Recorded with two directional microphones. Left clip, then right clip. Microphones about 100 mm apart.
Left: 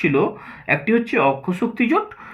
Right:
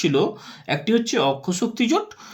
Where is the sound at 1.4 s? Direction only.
30° right (ahead or behind).